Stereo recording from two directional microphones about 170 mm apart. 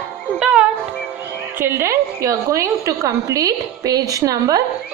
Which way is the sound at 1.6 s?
15° right (ahead or behind).